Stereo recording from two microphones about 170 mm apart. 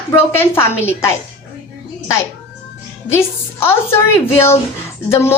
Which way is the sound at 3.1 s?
15° left (ahead or behind).